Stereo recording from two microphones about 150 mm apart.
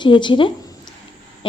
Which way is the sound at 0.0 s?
30° left (ahead or behind).